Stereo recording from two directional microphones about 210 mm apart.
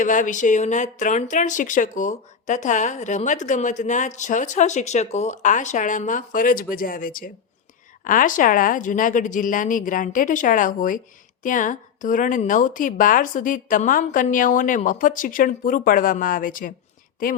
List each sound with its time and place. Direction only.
0.0 s speech: 40° left (ahead or behind)